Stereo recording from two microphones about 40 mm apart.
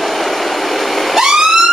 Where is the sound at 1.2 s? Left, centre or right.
Centre.